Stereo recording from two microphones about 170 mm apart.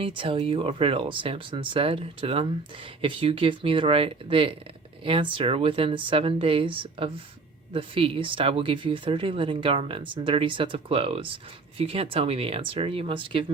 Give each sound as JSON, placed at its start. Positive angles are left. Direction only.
{"t": 0.0, "sound": "speech", "side_deg": -30}